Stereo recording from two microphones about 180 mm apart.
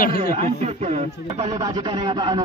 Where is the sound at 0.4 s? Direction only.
35° right (ahead or behind).